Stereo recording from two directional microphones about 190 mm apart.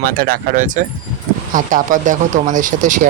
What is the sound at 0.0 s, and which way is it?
Speech, 50° right (ahead or behind).